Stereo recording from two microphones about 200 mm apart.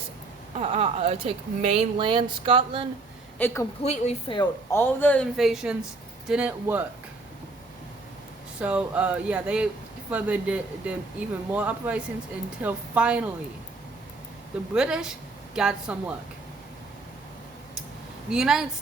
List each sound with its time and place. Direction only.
0.5 s speech: 30° right (ahead or behind)
3.3 s a woman's voice: 10° left (ahead or behind)
3.8 s a woman's voice: 30° left (ahead or behind)
4.7 s speech: 10° left (ahead or behind); by 6.8 s 5° right (ahead or behind)
8.5 s speech: 5° right (ahead or behind)
14.7 s speech: 5° right (ahead or behind)
18.3 s speech: centre (ahead or behind)